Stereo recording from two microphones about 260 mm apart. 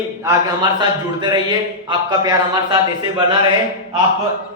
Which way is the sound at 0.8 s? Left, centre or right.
Centre.